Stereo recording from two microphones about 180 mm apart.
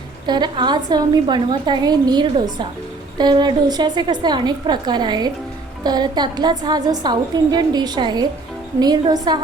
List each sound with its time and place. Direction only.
0.3 s a woman's voice: 25° right (ahead or behind)